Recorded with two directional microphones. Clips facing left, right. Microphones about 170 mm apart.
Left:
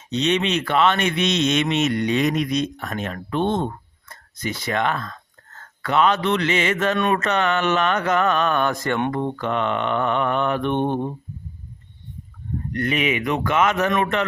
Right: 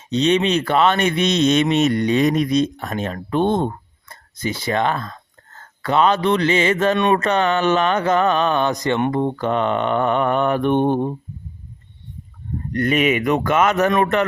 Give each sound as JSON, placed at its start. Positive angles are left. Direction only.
{"t": 0.1, "sound": "mantra", "side_deg": -35}
{"t": 1.7, "sound": "speech", "side_deg": -40}
{"t": 7.1, "sound": "mantra", "side_deg": -35}
{"t": 9.1, "sound": "mantra", "side_deg": -30}
{"t": 12.7, "sound": "speech", "side_deg": -45}